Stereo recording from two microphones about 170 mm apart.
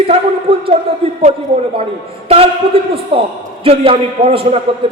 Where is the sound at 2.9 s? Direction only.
35° right (ahead or behind).